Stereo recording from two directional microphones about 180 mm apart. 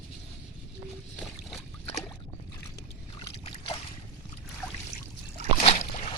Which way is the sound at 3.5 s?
30° left (ahead or behind).